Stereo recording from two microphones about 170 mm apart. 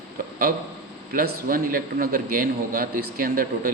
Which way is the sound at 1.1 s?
55° right (ahead or behind).